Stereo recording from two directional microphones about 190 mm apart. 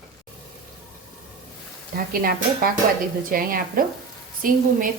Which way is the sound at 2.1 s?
50° right (ahead or behind).